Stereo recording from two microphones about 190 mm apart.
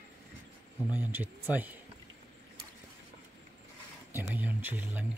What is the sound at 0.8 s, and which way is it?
Speech, 10° right (ahead or behind).